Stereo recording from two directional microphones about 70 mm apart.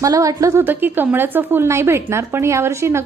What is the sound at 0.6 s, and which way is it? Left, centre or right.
A woman's voice, right.